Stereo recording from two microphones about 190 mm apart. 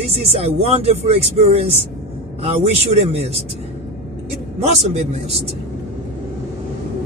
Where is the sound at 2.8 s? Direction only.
30° right (ahead or behind).